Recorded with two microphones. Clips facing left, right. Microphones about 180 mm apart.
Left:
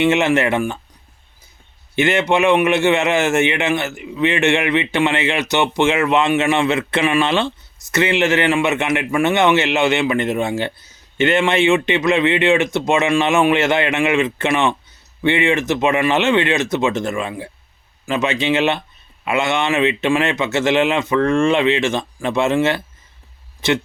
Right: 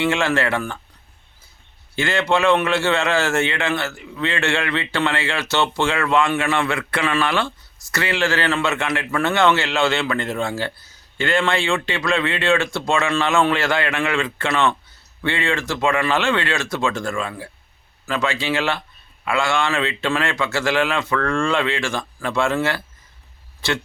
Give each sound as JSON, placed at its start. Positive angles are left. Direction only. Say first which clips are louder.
{"t": 0.0, "sound": "a man's voice", "louder": "left 5 dB", "side_deg": 20}
{"t": 2.0, "sound": "a man's voice", "louder": "left 4 dB", "side_deg": 20}